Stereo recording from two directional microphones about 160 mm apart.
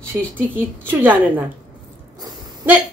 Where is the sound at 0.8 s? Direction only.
10° right (ahead or behind).